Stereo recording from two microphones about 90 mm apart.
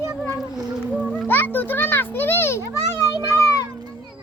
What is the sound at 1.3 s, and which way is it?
Children playing, 20° left (ahead or behind).